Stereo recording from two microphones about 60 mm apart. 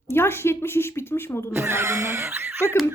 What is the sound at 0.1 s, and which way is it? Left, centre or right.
A woman's voice, left.